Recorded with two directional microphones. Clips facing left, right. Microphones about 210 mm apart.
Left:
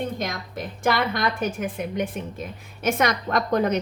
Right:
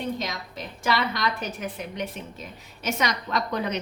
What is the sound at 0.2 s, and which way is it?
A woman's voice, 50° left (ahead or behind).